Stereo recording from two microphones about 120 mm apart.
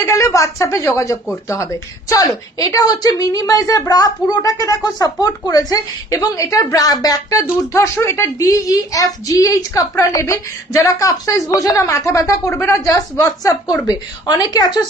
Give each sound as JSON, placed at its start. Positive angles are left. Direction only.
{"t": 0.0, "sound": "a woman's voice", "side_deg": 25}